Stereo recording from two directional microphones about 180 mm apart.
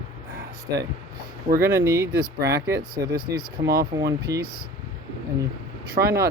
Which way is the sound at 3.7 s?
20° right (ahead or behind).